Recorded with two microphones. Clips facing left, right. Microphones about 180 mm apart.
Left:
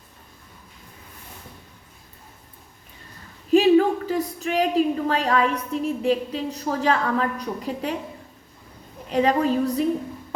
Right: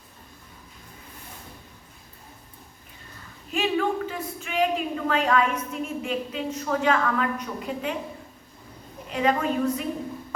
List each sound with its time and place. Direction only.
3.5 s a woman's voice: 35° left (ahead or behind)
9.1 s a woman's voice: 35° left (ahead or behind)